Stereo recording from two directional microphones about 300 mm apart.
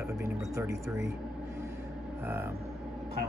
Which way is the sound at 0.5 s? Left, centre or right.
Centre.